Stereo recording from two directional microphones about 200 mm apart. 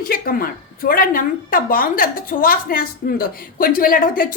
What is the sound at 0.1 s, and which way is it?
A woman's voice, 45° left (ahead or behind).